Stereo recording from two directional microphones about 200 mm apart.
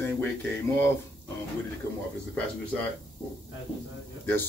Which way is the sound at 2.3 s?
5° left (ahead or behind).